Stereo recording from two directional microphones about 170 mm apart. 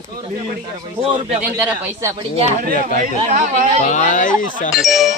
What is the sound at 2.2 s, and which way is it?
Speech, 35° right (ahead or behind).